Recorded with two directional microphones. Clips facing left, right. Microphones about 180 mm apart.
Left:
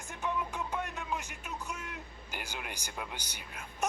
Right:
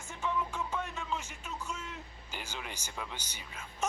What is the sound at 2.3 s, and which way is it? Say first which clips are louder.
Speech: left 1 dB; 15° left (ahead or behind).